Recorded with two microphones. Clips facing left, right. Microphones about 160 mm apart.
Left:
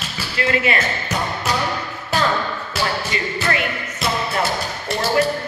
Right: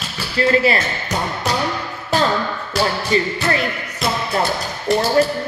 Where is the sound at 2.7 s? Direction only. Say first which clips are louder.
Right 6 dB; 35° right (ahead or behind).